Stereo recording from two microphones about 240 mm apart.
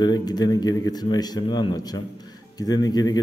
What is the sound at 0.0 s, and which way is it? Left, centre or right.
Speech, centre.